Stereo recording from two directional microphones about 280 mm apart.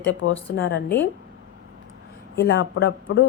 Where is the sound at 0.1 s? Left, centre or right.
Left.